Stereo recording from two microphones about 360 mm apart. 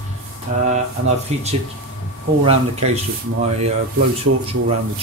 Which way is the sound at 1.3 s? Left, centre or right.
Centre.